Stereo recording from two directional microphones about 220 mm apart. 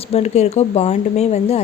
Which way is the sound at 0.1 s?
30° left (ahead or behind).